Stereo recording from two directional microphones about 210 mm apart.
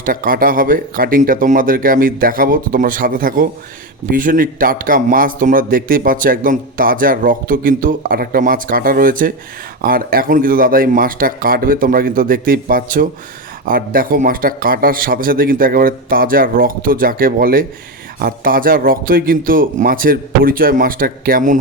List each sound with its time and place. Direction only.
0.0 s a man's voice: 45° right (ahead or behind)